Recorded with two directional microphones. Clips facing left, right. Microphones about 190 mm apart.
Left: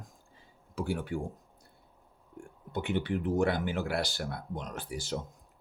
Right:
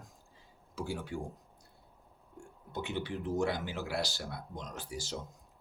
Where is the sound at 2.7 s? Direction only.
55° left (ahead or behind).